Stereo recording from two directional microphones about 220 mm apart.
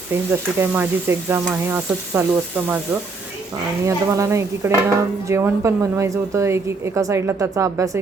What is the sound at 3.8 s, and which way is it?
A woman's voice, 15° right (ahead or behind).